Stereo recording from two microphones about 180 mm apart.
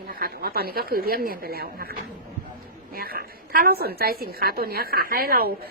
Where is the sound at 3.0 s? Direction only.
55° right (ahead or behind).